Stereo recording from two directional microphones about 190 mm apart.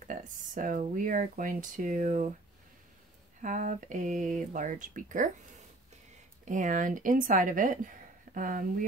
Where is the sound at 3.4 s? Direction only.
45° right (ahead or behind).